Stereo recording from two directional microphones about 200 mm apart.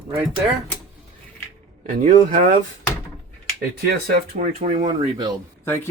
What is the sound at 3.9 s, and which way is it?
Speech, 50° right (ahead or behind).